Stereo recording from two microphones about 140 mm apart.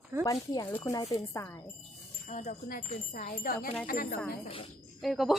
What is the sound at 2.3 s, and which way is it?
Speech, 60° left (ahead or behind).